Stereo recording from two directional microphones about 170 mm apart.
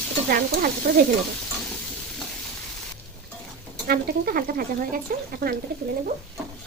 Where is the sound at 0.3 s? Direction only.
60° right (ahead or behind).